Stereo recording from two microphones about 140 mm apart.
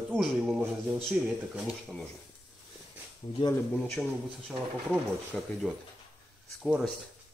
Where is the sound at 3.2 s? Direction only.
30° left (ahead or behind).